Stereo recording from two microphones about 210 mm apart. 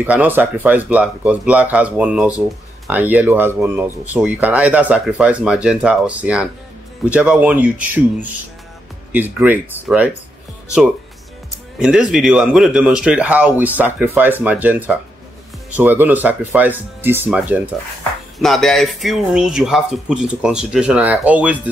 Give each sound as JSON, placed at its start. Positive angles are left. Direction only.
{"t": 0.0, "sound": "speech", "side_deg": -5}
{"t": 11.8, "sound": "speech", "side_deg": -5}